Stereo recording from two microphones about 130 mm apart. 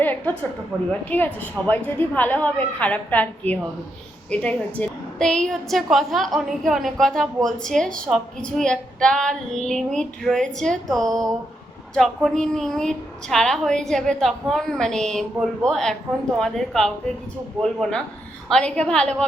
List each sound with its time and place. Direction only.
0.0 s a woman's voice: 15° left (ahead or behind)
0.7 s a woman's voice: 5° right (ahead or behind)
1.1 s a woman's voice: 15° left (ahead or behind)
11.1 s a sound: 25° right (ahead or behind)
11.9 s a woman's voice: centre (ahead or behind)